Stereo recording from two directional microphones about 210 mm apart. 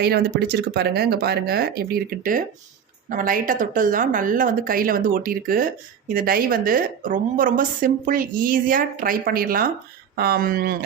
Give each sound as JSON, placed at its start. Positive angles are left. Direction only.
{"t": 0.0, "sound": "a woman's voice", "side_deg": -50}